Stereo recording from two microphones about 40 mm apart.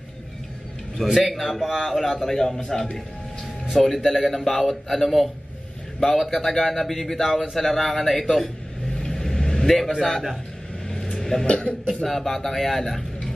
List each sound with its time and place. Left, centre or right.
1.0 s a man's voice: centre
2.0 s speech: centre
3.7 s a man's voice: centre
6.4 s a man's voice: centre
8.9 s vehicle: centre
9.7 s speech: centre
10.9 s vehicle: centre
11.4 s speech: left
12.0 s speech: centre